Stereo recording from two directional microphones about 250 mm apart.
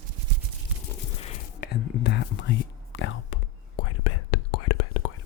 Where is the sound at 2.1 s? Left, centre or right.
Left.